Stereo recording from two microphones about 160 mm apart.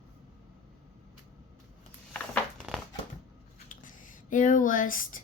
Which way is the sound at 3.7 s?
55° left (ahead or behind).